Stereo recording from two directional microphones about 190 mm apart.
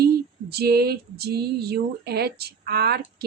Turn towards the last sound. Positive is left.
turn(degrees=-55)  # may be behind; listen again after turning